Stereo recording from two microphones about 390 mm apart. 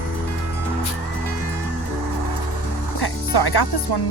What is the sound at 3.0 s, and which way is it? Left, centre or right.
Speech, left.